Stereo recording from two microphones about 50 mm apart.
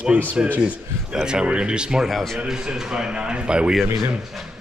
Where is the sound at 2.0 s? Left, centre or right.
Centre.